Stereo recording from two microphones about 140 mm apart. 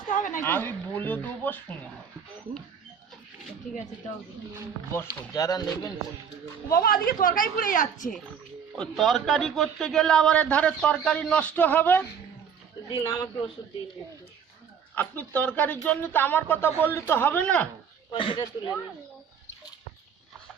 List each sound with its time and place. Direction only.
0.2 s a sound: 65° left (ahead or behind)
0.4 s a man's voice: 15° left (ahead or behind)
5.3 s speech: 25° left (ahead or behind)
6.7 s a woman's voice: 90° left; by 8.1 s 75° left (ahead or behind)
8.8 s a man's voice: centre (ahead or behind); by 13.4 s 20° left (ahead or behind)
14.9 s a man's voice: 10° left (ahead or behind)
18.1 s speech: 35° left (ahead or behind)